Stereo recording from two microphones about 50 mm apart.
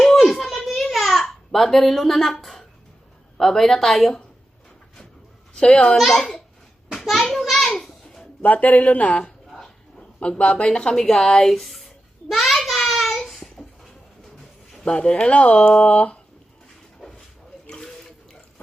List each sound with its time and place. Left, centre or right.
0.0 s a sound: centre
3.3 s speech: centre
5.5 s speech: centre
6.0 s a child's voice: centre
7.0 s a sound: centre
8.4 s speech: left
9.6 s dog: centre
10.2 s a child's voice: left; by 11.8 s centre
12.3 s a sound: centre
14.9 s speech: centre
17.0 s a sound: centre
17.7 s water: centre